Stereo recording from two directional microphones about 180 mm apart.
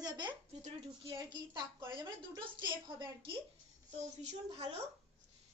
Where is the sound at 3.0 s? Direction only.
30° right (ahead or behind).